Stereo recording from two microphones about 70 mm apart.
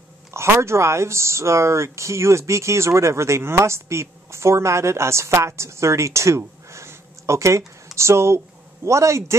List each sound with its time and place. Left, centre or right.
0.3 s speech: right